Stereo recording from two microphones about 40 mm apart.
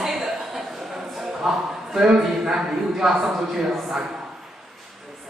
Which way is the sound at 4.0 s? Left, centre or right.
Centre.